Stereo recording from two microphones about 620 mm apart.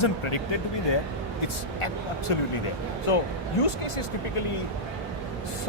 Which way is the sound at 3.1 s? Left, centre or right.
Left.